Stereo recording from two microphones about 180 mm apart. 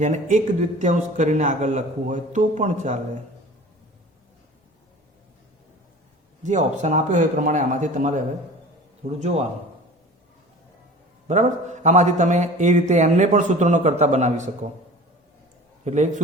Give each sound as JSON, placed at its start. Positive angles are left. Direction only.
{"t": 0.0, "sound": "a man's voice", "side_deg": -40}
{"t": 6.4, "sound": "a man's voice", "side_deg": -40}
{"t": 11.3, "sound": "a man's voice", "side_deg": -40}
{"t": 15.8, "sound": "a man's voice", "side_deg": -40}